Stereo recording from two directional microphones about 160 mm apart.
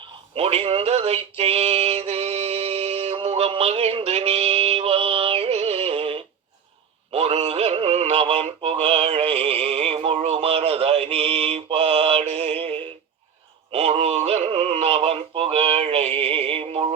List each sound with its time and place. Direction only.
0.3 s synthetic singing: 40° right (ahead or behind)
13.7 s synthetic singing: 40° right (ahead or behind)